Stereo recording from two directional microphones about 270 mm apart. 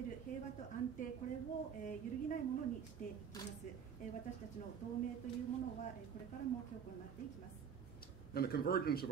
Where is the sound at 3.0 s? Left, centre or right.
Left.